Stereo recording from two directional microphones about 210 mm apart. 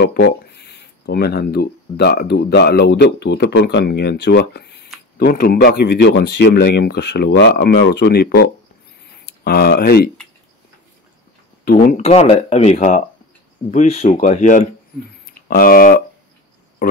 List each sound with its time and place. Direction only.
0.0 s speech: 50° left (ahead or behind)
11.6 s speech: 40° left (ahead or behind)